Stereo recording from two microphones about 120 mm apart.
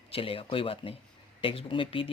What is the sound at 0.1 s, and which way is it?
Speech, 50° left (ahead or behind).